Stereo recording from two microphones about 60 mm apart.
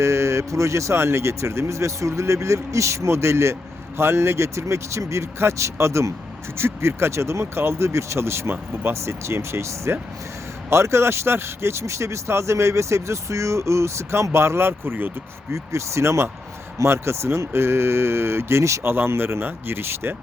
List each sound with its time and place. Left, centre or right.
0.0 s speech: right
15.5 s speech: right
18.8 s speech: right